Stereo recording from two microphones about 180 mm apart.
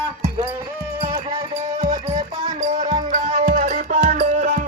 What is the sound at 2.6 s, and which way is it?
Music, 40° right (ahead or behind).